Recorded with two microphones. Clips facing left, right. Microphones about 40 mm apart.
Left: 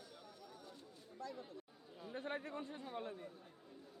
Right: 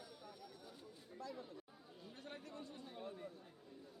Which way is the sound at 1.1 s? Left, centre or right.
Centre.